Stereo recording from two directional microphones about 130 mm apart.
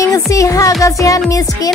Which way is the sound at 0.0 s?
25° left (ahead or behind).